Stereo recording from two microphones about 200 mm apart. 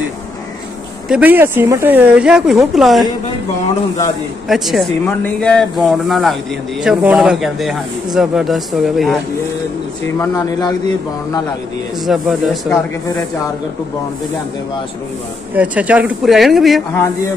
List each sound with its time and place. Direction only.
1.0 s speech: 5° right (ahead or behind)
4.5 s speech: centre (ahead or behind)
10.1 s speech: 15° left (ahead or behind)
12.1 s speech: centre (ahead or behind)
15.5 s speech: 5° right (ahead or behind)